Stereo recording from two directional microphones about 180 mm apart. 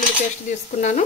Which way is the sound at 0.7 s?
40° left (ahead or behind).